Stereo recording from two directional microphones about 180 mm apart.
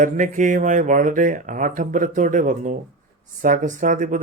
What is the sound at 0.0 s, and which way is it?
Speech, 45° right (ahead or behind).